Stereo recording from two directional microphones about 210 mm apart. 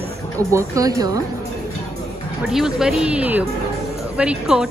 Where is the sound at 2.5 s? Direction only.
Centre (ahead or behind).